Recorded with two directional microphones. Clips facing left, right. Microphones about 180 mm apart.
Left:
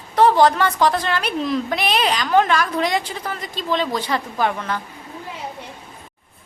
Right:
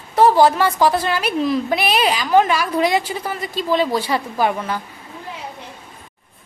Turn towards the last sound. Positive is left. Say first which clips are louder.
# right 2 dB
turn(degrees=-10)  # may be behind; listen again after turning